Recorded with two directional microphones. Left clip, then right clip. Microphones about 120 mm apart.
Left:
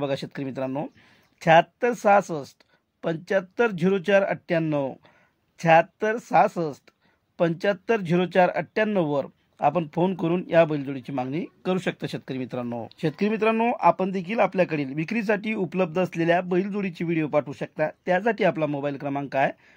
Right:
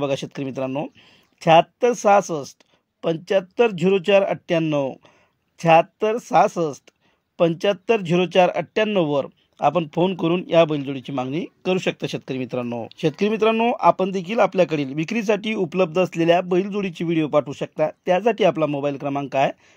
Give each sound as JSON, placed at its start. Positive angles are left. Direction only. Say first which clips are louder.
{"t": 0.0, "sound": "speech", "louder": "right 4 dB", "side_deg": -20}